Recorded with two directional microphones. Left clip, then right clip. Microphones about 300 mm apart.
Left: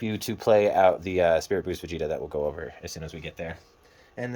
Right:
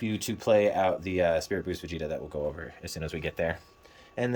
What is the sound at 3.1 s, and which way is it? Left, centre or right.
Speech, centre.